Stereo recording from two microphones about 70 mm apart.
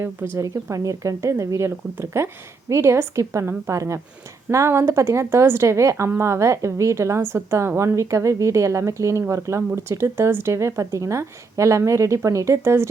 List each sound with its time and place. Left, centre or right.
0.3 s a woman's voice: right
1.7 s a woman's voice: right